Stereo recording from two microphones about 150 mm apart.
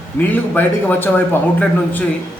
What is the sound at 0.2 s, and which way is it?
A man's voice, 15° left (ahead or behind).